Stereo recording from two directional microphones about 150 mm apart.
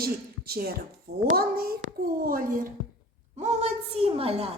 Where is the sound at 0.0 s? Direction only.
90° right.